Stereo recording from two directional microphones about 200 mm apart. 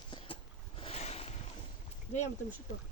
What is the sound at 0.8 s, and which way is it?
Boat, 30° left (ahead or behind).